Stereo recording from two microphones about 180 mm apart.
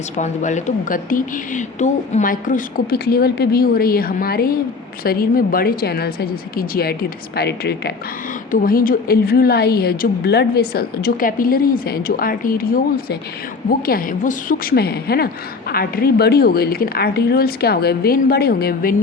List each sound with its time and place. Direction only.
0.2 s a woman's voice: 40° left (ahead or behind); by 7.9 s 65° left (ahead or behind)
8.5 s a woman's voice: 55° left (ahead or behind)